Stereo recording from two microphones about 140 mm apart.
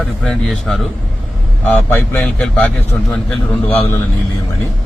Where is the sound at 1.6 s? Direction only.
15° left (ahead or behind).